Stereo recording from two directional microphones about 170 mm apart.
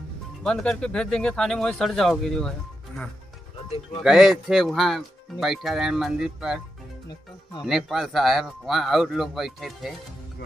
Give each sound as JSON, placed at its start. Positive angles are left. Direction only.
{"t": 0.4, "sound": "speech", "side_deg": 5}
{"t": 4.0, "sound": "speech", "side_deg": -5}
{"t": 7.6, "sound": "speech", "side_deg": 0}